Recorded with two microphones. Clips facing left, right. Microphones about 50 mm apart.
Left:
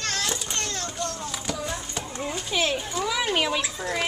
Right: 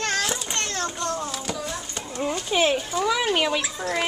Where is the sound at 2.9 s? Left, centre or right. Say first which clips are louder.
Right 3 dB; centre.